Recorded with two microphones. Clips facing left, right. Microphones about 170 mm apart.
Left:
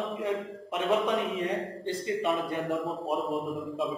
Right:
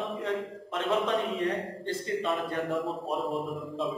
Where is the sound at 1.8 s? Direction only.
15° left (ahead or behind).